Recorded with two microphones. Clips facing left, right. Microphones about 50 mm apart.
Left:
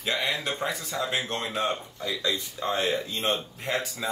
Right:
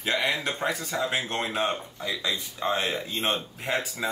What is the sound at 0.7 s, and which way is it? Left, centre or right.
Speech, centre.